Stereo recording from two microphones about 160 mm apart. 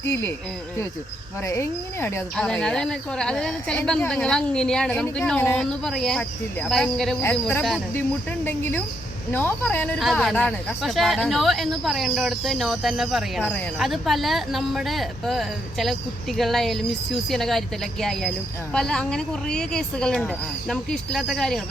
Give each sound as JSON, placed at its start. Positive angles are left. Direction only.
{"t": 0.0, "sound": "speech", "side_deg": 15}
{"t": 1.5, "sound": "a woman's voice", "side_deg": 15}
{"t": 7.2, "sound": "a woman's voice", "side_deg": 15}